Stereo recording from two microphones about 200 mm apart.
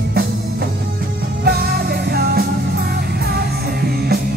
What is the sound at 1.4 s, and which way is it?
Music, 50° right (ahead or behind).